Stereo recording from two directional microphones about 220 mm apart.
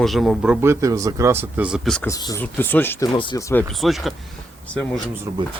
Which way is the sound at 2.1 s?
15° left (ahead or behind).